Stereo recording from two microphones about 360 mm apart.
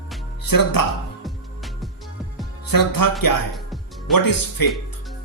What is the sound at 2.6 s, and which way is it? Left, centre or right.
Speech, left.